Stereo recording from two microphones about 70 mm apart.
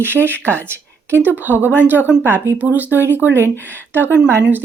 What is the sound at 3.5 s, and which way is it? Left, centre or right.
Speech, left.